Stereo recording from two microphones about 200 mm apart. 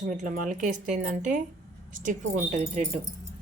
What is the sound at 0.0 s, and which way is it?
Speech, 40° right (ahead or behind).